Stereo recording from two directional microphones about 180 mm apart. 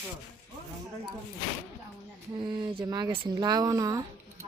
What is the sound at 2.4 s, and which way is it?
Speech, 25° right (ahead or behind).